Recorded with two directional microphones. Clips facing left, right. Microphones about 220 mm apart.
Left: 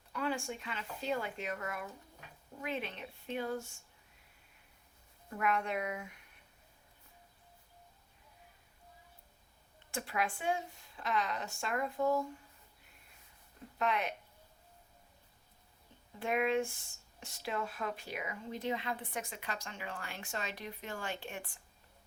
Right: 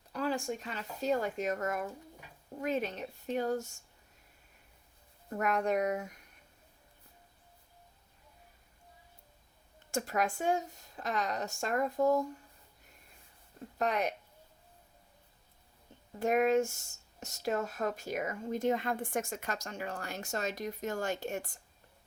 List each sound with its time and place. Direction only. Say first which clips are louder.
0.1 s speech: right 3 dB; 40° right (ahead or behind)
5.3 s speech: right 4 dB; 40° right (ahead or behind)
9.9 s speech: right 4 dB; 45° right (ahead or behind)
13.7 s speech: right 3 dB; 40° right (ahead or behind)
16.2 s speech: right 5 dB; 45° right (ahead or behind)